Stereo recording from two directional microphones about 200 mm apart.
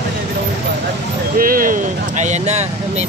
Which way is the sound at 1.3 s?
45° right (ahead or behind).